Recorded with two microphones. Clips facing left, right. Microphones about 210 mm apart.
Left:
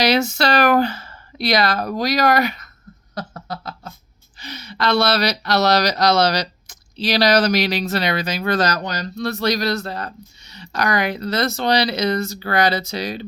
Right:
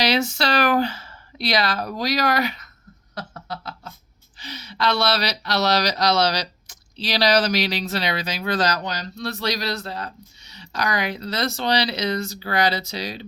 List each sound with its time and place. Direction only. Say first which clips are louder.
0.0 s speech: left 4 dB; 45° left (ahead or behind)
3.2 s a sound: left 3 dB; 40° left (ahead or behind)
4.4 s speech: left 1 dB; 50° left (ahead or behind)